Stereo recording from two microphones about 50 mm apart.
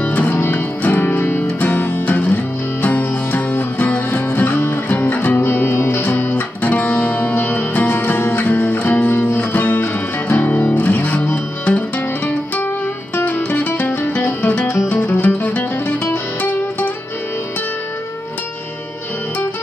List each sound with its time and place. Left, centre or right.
0.4 s music: left
1.6 s music: left
4.1 s music: left
5.4 s music: left
6.3 s music: left
8.5 s music: left
13.1 s music: left
15.2 s music: left